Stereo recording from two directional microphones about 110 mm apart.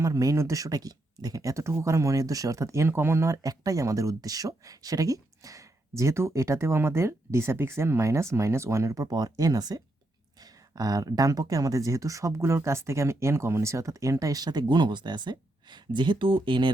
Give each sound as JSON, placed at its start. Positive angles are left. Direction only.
{"t": 0.0, "sound": "speech", "side_deg": -30}